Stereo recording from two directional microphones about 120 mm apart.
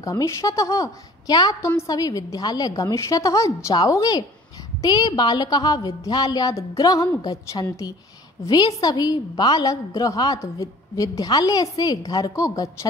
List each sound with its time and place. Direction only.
0.0 s a woman's voice: 25° left (ahead or behind)